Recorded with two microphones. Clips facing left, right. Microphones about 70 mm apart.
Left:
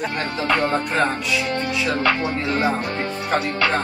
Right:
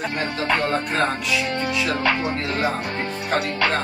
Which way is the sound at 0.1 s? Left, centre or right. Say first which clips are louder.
Even; left.